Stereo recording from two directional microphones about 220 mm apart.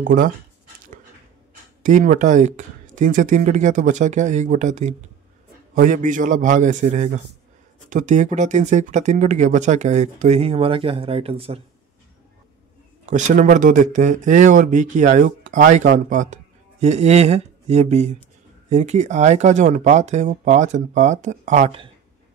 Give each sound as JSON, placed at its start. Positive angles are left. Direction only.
{"t": 0.0, "sound": "speech", "side_deg": -40}
{"t": 1.8, "sound": "speech", "side_deg": -35}
{"t": 13.0, "sound": "speech", "side_deg": -35}